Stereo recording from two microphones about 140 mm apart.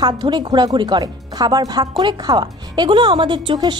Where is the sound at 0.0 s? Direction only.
35° right (ahead or behind).